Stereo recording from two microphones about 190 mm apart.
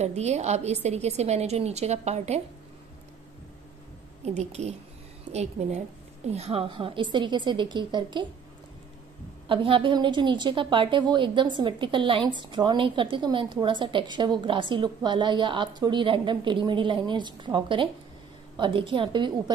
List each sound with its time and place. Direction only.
0.0 s a woman's voice: 35° right (ahead or behind)
4.2 s a woman's voice: 35° right (ahead or behind)
9.5 s a woman's voice: 25° right (ahead or behind)